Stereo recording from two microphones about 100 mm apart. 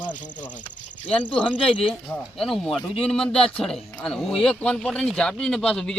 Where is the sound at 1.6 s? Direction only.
65° left (ahead or behind).